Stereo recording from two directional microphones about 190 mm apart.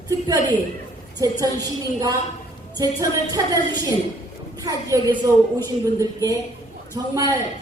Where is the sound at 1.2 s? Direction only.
20° right (ahead or behind).